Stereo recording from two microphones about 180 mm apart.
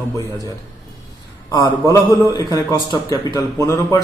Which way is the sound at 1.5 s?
20° left (ahead or behind).